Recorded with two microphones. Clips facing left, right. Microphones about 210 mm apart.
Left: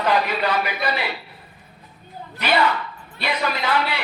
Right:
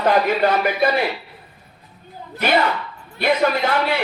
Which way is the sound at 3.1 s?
50° right (ahead or behind).